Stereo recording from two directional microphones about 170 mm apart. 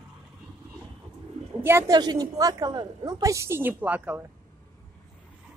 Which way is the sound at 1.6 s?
15° right (ahead or behind).